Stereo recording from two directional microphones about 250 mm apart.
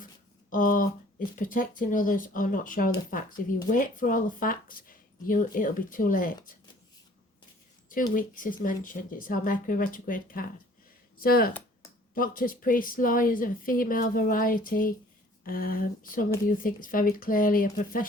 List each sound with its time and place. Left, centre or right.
0.5 s speech: left
8.1 s speech: left